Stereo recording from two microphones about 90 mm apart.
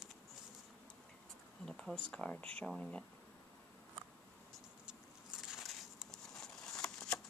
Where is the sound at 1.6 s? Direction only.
10° left (ahead or behind).